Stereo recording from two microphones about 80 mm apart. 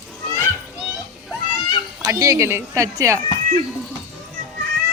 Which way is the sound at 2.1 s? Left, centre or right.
Right.